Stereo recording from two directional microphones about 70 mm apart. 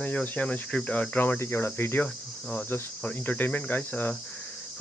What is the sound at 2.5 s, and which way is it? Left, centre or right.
Speech, left.